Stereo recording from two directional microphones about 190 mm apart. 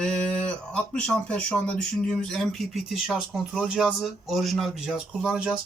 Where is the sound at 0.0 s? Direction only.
5° left (ahead or behind).